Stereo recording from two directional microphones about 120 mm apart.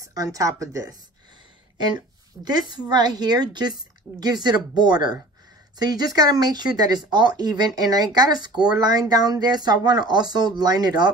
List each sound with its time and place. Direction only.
0.0 s speech: 30° right (ahead or behind)
2.0 s speech: 35° right (ahead or behind)